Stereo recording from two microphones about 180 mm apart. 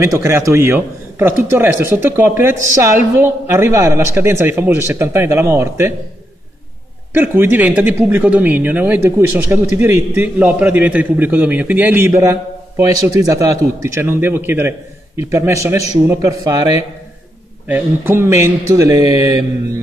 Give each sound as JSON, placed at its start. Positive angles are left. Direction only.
{"t": 0.0, "sound": "speech", "side_deg": -15}
{"t": 7.2, "sound": "speech", "side_deg": -10}